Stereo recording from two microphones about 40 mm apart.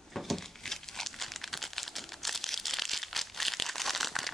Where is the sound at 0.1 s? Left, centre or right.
Centre.